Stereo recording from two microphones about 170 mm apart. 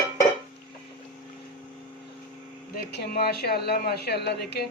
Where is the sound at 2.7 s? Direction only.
65° left (ahead or behind).